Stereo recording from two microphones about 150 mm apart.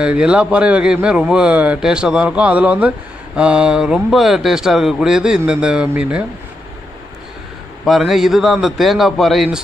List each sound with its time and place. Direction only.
0.0 s a man's voice: 10° right (ahead or behind)
7.8 s speech: centre (ahead or behind)